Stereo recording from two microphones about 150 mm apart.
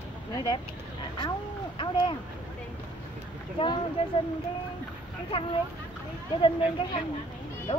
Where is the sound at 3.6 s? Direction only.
35° left (ahead or behind).